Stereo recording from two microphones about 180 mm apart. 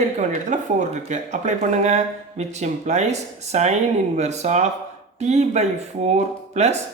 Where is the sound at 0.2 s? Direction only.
40° right (ahead or behind).